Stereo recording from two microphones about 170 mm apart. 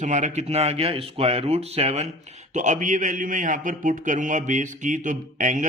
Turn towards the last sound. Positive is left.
turn(degrees=-50)  # may be behind; listen again after turning